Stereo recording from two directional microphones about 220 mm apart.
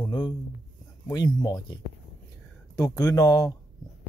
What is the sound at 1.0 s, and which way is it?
Speech, 15° left (ahead or behind).